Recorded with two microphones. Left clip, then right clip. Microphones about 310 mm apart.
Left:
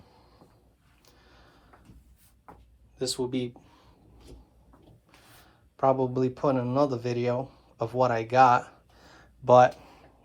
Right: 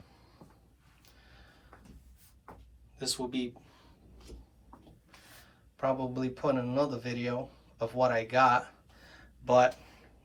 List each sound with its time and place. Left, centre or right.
1.0 s a sound: centre
3.0 s speech: centre
5.7 s speech: centre